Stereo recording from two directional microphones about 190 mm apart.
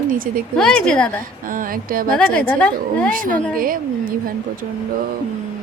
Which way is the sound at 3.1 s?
45° right (ahead or behind).